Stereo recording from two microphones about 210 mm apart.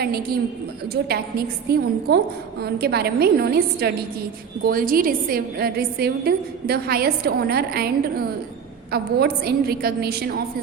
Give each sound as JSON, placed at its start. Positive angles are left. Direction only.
{"t": 1.0, "sound": "a woman's voice", "side_deg": -50}